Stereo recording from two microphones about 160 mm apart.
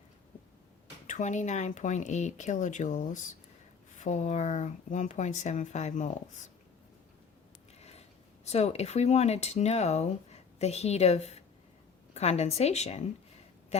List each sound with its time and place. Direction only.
1.0 s speech: 50° left (ahead or behind)
7.8 s a sound: 40° left (ahead or behind)
8.4 s speech: 40° left (ahead or behind)